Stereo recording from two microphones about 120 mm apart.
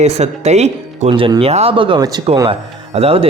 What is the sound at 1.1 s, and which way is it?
Speech, 40° right (ahead or behind).